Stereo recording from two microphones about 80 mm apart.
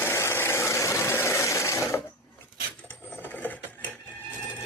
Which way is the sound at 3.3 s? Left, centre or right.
Left.